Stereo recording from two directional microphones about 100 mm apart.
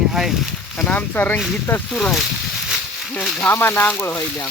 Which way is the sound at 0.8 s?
15° left (ahead or behind).